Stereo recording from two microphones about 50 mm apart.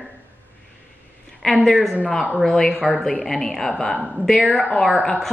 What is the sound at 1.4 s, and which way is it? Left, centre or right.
A man's voice, centre.